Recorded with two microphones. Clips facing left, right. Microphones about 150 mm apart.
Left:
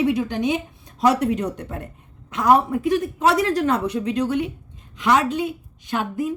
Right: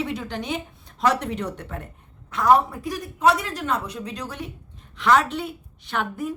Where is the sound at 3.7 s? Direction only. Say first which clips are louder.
Left 6 dB; 25° left (ahead or behind).